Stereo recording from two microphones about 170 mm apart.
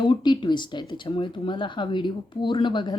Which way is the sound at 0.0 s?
25° left (ahead or behind).